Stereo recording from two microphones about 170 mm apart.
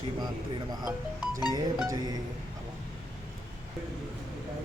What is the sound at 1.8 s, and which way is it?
Speech, 25° right (ahead or behind).